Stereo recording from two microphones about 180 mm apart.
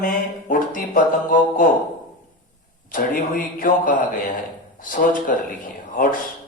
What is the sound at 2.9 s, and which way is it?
Speech, 50° left (ahead or behind).